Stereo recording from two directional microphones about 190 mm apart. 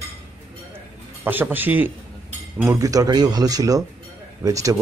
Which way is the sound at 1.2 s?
10° right (ahead or behind).